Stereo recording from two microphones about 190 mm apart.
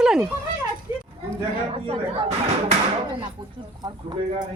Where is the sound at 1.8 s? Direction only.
30° right (ahead or behind).